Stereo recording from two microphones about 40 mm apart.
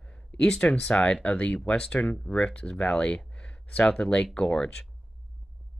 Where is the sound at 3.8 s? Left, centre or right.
Centre.